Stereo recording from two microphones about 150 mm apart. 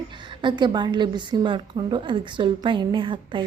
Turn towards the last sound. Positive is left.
turn(degrees=-35)  # may be behind; listen again after turning